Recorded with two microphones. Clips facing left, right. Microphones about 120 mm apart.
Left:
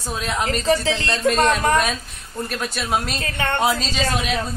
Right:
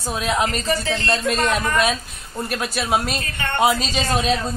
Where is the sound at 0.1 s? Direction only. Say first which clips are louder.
Right 3 dB; 10° right (ahead or behind).